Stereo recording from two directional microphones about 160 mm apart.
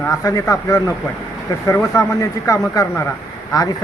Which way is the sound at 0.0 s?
20° left (ahead or behind).